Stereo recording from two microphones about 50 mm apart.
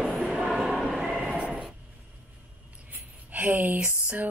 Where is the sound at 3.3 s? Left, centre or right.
Right.